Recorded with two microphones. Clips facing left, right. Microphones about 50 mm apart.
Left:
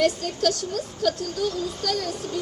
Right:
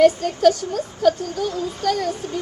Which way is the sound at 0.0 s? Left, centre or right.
Centre.